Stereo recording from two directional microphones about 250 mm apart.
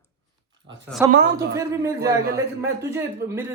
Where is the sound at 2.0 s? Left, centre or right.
Right.